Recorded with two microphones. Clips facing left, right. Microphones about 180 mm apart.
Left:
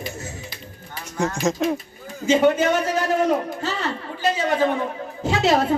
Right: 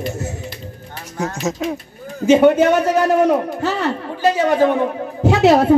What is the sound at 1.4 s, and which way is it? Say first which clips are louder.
Speech: left 1 dB; 5° right (ahead or behind).